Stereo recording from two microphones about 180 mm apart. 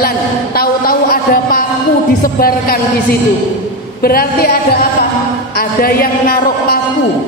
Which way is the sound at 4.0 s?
55° left (ahead or behind).